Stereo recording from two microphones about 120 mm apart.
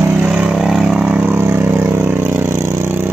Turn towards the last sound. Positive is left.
turn(degrees=-15)  # may be behind; listen again after turning